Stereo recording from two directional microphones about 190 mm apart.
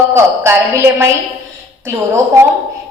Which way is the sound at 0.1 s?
15° right (ahead or behind).